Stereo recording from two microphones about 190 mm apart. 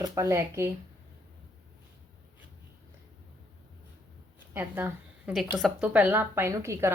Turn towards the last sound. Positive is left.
turn(degrees=-15)  # may be behind; listen again after turning